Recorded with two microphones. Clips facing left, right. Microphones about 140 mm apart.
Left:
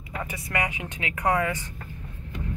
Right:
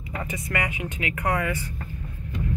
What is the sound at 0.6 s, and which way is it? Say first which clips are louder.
Speech: left 1 dB; 15° left (ahead or behind).